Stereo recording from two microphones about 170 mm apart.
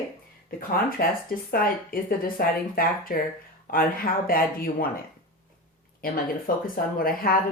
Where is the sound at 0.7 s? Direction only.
60° left (ahead or behind).